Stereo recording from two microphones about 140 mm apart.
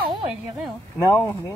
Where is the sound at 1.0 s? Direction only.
20° left (ahead or behind).